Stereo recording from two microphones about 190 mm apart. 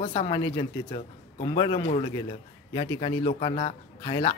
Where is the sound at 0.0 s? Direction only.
30° left (ahead or behind).